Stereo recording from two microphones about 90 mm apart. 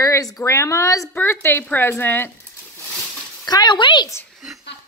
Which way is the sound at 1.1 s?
25° left (ahead or behind).